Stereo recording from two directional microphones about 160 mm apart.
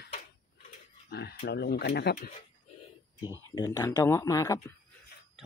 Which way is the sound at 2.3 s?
40° left (ahead or behind).